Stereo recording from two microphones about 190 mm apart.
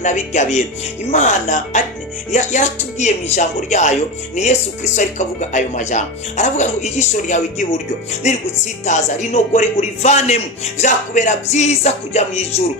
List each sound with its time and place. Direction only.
0.0 s a man's voice: 40° left (ahead or behind)
8.8 s a man's voice: 40° left (ahead or behind)